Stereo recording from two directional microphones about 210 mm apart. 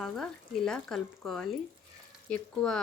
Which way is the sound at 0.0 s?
Centre (ahead or behind).